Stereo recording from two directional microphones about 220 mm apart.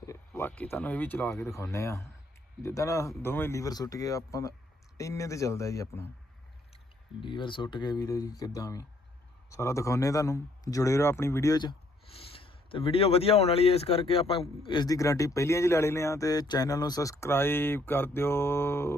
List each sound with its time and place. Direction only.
0.0 s speech: 10° left (ahead or behind)
7.2 s speech: 20° left (ahead or behind)